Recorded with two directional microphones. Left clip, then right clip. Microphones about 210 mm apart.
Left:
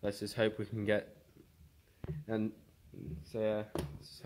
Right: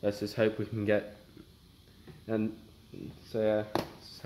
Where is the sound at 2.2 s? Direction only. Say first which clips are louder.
Right 5 dB; 40° left (ahead or behind).